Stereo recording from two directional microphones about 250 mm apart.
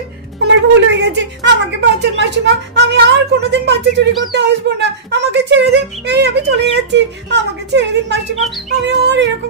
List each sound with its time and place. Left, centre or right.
0.4 s speech: right